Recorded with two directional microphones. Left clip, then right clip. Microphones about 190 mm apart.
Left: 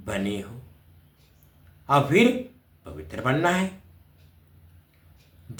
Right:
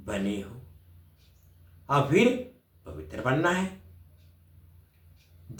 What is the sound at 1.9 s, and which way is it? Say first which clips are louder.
Speech: left 3 dB; 35° left (ahead or behind).